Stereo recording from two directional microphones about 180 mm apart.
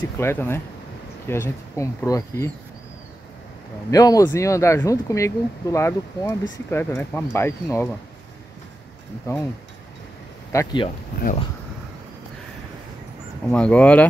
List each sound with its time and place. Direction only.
0.2 s speech: 15° left (ahead or behind)
3.9 s speech: 20° left (ahead or behind)
9.3 s speech: 15° left (ahead or behind)
10.5 s speech: 20° left (ahead or behind)
13.5 s speech: 5° left (ahead or behind)